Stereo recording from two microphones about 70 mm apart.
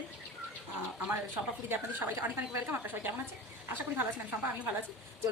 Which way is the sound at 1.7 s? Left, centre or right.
Right.